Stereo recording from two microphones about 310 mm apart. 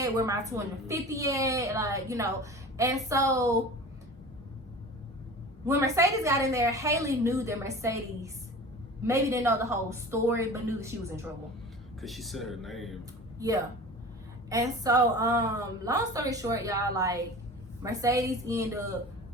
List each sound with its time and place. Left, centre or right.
0.0 s a woman's voice: centre
5.6 s a woman's voice: centre
11.9 s speech: centre
13.4 s a woman's voice: centre